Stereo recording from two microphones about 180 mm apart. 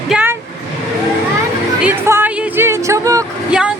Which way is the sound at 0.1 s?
10° right (ahead or behind).